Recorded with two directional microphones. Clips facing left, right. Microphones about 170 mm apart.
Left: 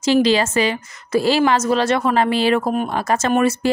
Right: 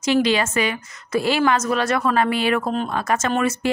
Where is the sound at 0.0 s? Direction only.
35° left (ahead or behind).